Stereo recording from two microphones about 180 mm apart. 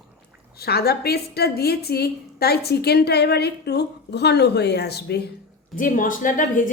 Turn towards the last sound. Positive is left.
turn(degrees=50)  # may be behind; listen again after turning